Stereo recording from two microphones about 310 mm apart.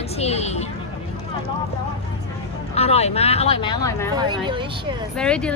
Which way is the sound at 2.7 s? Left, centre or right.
Centre.